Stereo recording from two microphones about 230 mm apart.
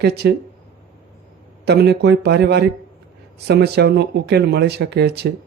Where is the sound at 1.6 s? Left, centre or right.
Right.